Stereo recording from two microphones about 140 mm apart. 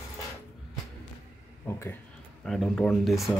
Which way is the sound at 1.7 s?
20° left (ahead or behind).